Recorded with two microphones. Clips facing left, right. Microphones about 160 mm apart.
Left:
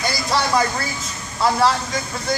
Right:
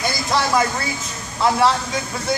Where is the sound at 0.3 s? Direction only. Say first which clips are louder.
Right 1 dB; centre (ahead or behind).